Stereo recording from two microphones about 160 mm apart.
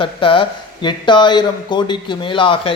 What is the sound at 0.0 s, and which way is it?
A man's voice, 30° left (ahead or behind).